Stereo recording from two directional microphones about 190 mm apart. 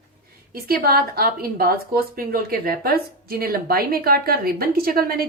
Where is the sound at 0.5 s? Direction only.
50° right (ahead or behind).